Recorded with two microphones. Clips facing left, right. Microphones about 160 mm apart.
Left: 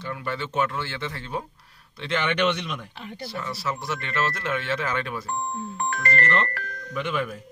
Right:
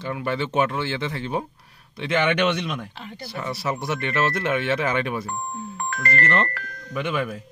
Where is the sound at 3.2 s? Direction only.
15° right (ahead or behind).